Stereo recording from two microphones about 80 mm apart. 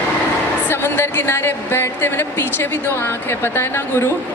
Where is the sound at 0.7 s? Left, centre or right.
Left.